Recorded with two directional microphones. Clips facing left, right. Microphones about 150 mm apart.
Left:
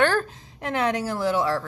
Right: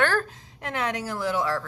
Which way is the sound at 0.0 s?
25° left (ahead or behind).